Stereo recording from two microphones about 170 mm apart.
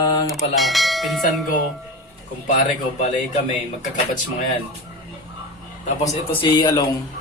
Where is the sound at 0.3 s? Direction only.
Centre (ahead or behind).